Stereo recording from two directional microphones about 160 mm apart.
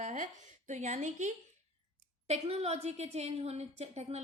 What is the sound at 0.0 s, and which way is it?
A woman's voice, 50° right (ahead or behind).